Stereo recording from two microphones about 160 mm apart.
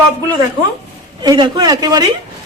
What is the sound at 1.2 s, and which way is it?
Speech, 25° right (ahead or behind).